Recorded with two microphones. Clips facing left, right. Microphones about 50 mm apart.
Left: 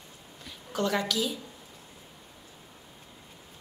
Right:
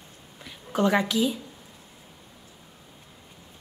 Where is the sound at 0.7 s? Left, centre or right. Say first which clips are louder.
Right 5 dB; right.